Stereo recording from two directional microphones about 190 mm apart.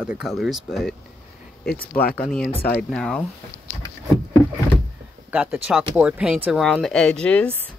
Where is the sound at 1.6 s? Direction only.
50° left (ahead or behind).